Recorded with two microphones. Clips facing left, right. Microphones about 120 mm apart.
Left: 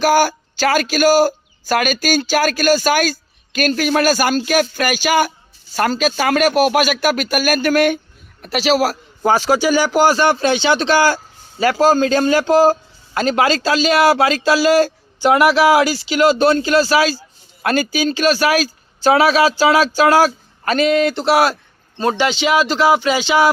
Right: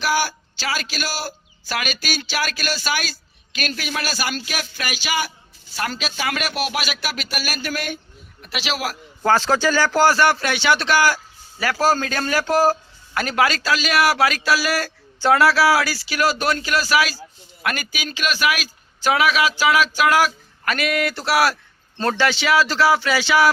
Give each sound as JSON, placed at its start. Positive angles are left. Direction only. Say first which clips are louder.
{"t": 0.0, "sound": "speech", "louder": "left 8 dB", "side_deg": 50}
{"t": 8.4, "sound": "speech", "louder": "left 11 dB", "side_deg": 40}
{"t": 9.2, "sound": "speech", "louder": "left 3 dB", "side_deg": 15}